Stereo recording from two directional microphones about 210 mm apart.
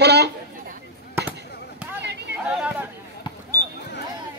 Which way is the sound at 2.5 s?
5° right (ahead or behind).